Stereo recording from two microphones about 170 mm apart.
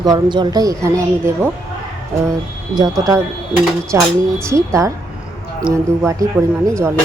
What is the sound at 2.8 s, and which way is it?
A woman's voice, 20° right (ahead or behind).